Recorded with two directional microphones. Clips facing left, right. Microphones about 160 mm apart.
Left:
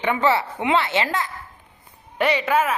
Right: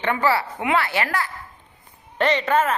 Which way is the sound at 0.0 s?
20° left (ahead or behind).